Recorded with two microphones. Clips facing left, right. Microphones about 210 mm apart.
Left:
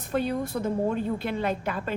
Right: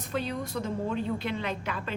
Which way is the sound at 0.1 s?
50° left (ahead or behind).